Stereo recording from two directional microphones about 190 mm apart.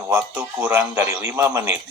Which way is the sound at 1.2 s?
15° right (ahead or behind).